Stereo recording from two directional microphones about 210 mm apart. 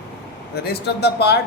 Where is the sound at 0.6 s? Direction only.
50° left (ahead or behind).